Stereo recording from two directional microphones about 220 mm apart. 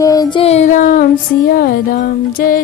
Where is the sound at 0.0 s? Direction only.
15° left (ahead or behind); by 1.0 s 35° left (ahead or behind).